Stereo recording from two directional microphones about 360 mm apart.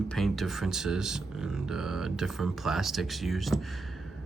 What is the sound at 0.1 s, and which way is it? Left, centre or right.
Speech, centre.